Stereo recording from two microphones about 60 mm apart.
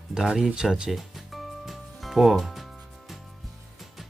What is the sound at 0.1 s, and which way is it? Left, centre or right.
Speech, centre.